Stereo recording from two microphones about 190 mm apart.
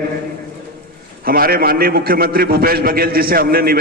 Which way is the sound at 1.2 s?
50° right (ahead or behind).